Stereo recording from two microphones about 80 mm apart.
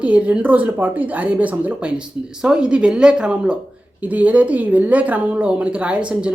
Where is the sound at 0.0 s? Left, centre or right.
Centre.